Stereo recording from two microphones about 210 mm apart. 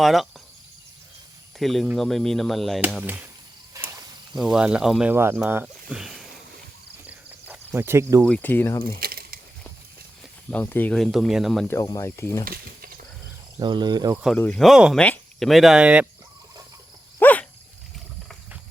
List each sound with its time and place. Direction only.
0.0 s speech: centre (ahead or behind)
1.5 s speech: centre (ahead or behind)
3.8 s cricket: 15° right (ahead or behind)
4.4 s speech: 5° right (ahead or behind)
7.1 s cricket: 5° right (ahead or behind)
8.2 s speech: 5° left (ahead or behind)
9.0 s a sound: 45° right (ahead or behind)
10.5 s speech: 10° left (ahead or behind)
11.7 s speech: 15° left (ahead or behind)
12.5 s snake: 45° right (ahead or behind)
13.6 s speech: 20° right (ahead or behind)
14.3 s speech: 5° left (ahead or behind)
17.2 s dog: 10° left (ahead or behind)